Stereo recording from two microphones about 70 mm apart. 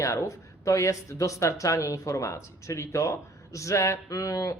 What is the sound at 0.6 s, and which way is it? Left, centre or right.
Speech, left.